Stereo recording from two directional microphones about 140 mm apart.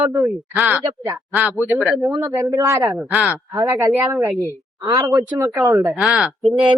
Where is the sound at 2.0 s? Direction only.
25° right (ahead or behind).